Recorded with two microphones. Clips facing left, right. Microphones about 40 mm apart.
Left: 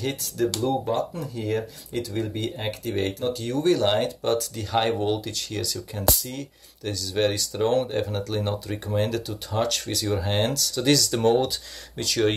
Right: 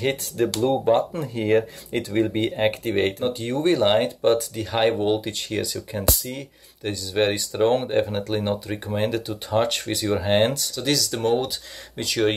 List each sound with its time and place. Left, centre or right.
0.0 s speech: right
3.3 s speech: right
10.7 s speech: centre
12.0 s speech: centre